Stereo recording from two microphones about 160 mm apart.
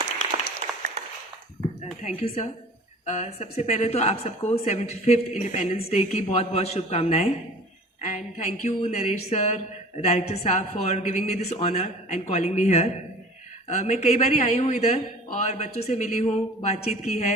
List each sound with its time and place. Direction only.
2.0 s a man's voice: 40° left (ahead or behind)